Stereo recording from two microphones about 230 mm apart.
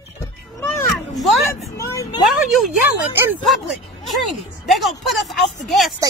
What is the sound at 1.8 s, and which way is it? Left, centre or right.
Vehicle, centre.